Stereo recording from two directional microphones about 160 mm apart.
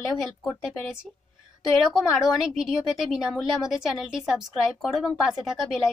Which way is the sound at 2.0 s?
5° right (ahead or behind).